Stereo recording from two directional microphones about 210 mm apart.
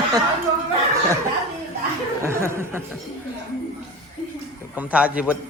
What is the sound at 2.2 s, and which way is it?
Speech, 10° right (ahead or behind).